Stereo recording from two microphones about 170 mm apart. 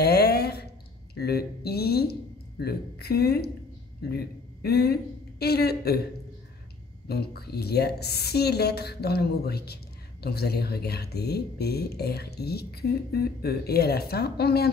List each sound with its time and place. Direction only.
0.0 s a sound: 70° left (ahead or behind)
1.1 s speech: 70° left (ahead or behind)
4.6 s speech: 70° left (ahead or behind)
7.1 s speech: 70° left (ahead or behind)